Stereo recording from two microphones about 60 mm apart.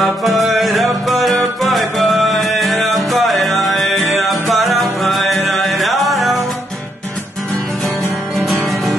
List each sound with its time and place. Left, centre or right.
0.0 s music: centre